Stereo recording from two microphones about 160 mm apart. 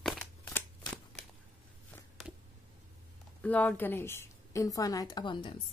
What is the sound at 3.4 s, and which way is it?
A woman's voice, 10° left (ahead or behind).